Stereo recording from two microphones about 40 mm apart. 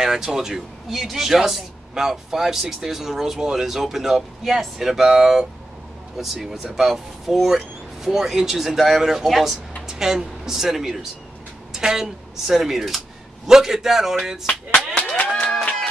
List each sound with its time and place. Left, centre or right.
0.0 s speech: centre
0.8 s a man's voice: centre
14.5 s a sound: left